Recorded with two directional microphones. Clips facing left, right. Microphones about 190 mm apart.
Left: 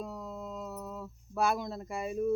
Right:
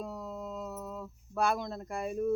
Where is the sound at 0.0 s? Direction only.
Centre (ahead or behind).